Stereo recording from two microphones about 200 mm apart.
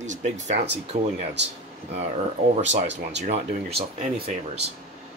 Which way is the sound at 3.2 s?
35° right (ahead or behind).